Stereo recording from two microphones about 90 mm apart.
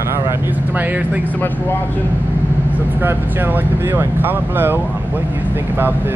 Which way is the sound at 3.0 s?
25° right (ahead or behind).